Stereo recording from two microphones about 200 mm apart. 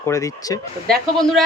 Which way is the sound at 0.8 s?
Centre (ahead or behind).